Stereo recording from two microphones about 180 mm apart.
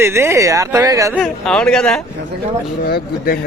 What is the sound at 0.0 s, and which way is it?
Speech, 15° right (ahead or behind).